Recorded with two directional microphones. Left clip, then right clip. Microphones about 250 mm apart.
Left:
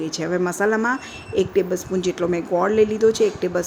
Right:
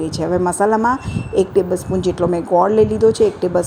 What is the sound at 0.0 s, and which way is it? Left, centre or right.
A woman's voice, centre.